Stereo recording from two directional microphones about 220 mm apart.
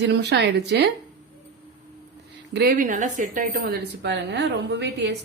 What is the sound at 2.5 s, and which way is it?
A woman's voice, 45° right (ahead or behind).